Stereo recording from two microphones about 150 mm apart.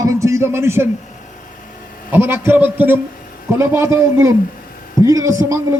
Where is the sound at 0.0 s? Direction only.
20° right (ahead or behind).